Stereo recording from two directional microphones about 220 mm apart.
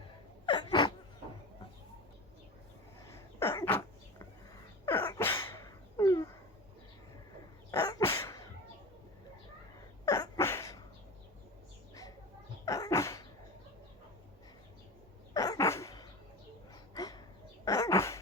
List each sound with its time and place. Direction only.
0.4 s gasp: 20° left (ahead or behind)
3.1 s cough: 10° left (ahead or behind)
4.9 s a sound: 10° left (ahead or behind)
7.7 s dog: 15° left (ahead or behind)
10.1 s a sound: 15° left (ahead or behind)
12.6 s sneeze: 15° left (ahead or behind)
15.3 s dog: 15° left (ahead or behind)